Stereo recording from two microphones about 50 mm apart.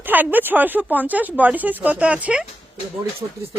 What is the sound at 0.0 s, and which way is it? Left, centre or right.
Speech, right.